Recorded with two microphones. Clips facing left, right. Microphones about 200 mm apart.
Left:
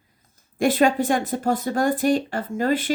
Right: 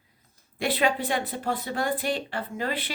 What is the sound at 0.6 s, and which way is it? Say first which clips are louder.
Speech: left 7 dB; 45° left (ahead or behind).